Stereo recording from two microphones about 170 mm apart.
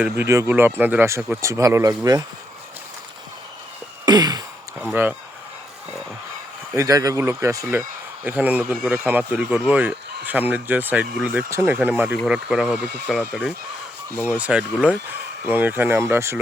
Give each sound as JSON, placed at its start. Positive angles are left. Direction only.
{"t": 0.0, "sound": "speech", "side_deg": -15}
{"t": 4.0, "sound": "sigh", "side_deg": -25}
{"t": 4.8, "sound": "a sound", "side_deg": -10}
{"t": 6.7, "sound": "speech", "side_deg": -20}
{"t": 14.3, "sound": "speech", "side_deg": -10}